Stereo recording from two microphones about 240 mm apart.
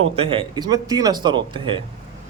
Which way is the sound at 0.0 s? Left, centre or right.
Right.